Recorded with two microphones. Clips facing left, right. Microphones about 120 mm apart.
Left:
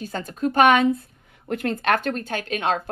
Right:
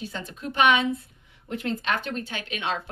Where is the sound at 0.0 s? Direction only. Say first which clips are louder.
Left 8 dB; 45° left (ahead or behind).